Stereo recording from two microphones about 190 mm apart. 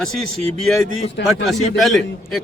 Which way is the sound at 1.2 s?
65° left (ahead or behind).